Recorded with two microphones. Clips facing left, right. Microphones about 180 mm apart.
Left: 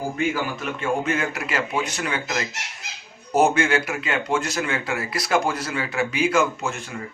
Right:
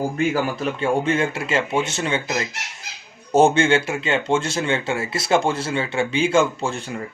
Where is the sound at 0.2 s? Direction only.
35° right (ahead or behind).